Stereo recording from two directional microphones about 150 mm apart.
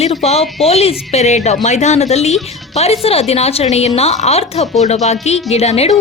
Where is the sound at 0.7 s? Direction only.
45° left (ahead or behind).